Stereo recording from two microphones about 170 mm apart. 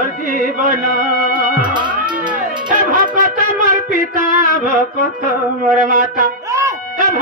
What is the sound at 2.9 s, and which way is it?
Shofar, 50° right (ahead or behind).